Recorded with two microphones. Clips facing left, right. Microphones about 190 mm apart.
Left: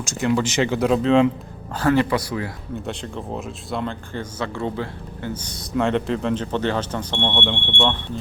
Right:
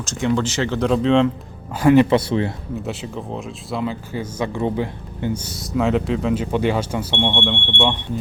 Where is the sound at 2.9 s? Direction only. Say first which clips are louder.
Left 1 dB; centre (ahead or behind); by 5.3 s 15° right (ahead or behind).